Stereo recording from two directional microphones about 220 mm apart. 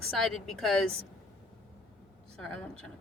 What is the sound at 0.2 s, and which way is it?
Speech, centre (ahead or behind).